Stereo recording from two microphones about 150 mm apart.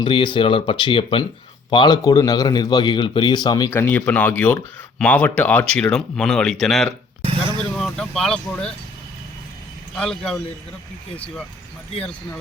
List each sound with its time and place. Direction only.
0.0 s a man's voice: 35° left (ahead or behind)
3.7 s speech: 15° left (ahead or behind)
9.9 s speech: 5° left (ahead or behind)